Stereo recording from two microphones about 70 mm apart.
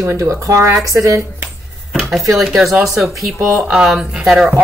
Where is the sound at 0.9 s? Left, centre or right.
Right.